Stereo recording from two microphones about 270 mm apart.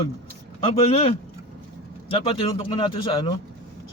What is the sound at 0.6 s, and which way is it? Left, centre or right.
Speech, left.